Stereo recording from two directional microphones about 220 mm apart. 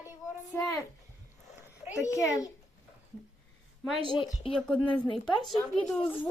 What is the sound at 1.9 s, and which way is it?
Speech, 15° left (ahead or behind).